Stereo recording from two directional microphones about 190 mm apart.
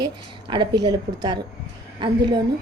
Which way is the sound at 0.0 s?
25° right (ahead or behind).